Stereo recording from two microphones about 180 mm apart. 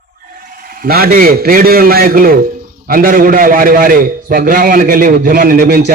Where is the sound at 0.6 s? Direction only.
55° right (ahead or behind).